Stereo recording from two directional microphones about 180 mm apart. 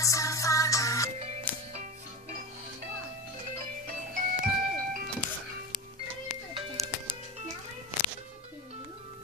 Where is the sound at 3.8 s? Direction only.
50° right (ahead or behind).